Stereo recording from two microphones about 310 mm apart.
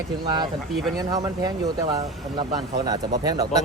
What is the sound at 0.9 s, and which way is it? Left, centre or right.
Speech, centre.